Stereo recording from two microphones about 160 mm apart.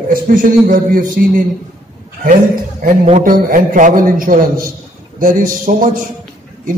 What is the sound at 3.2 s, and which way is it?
A man's voice, 55° right (ahead or behind).